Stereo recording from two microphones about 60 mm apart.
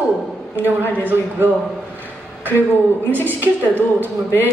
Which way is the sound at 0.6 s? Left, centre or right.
Right.